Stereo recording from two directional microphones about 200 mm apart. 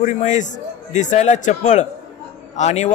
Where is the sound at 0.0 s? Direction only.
35° left (ahead or behind).